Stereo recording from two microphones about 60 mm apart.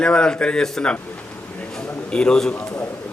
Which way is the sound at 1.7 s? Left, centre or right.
Centre.